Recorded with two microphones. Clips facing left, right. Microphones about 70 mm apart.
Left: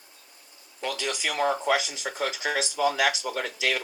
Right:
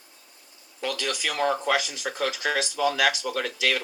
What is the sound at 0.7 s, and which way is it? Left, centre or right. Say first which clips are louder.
Speech: right 1 dB; centre.